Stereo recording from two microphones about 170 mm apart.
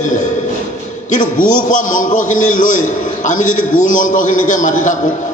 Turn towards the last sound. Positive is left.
turn(degrees=45)  # may be behind; listen again after turning